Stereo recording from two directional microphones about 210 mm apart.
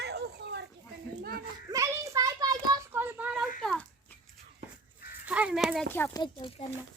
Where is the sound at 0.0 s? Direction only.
50° right (ahead or behind).